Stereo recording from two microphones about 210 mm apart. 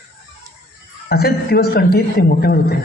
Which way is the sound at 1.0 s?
50° left (ahead or behind).